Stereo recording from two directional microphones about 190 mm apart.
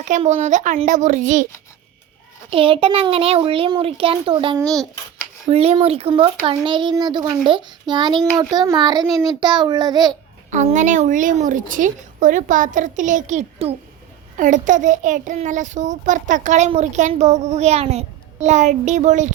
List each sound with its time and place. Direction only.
0.0 s a child's voice: 40° right (ahead or behind)
2.5 s a child's voice: 30° right (ahead or behind)
10.5 s a child's voice: 40° right (ahead or behind)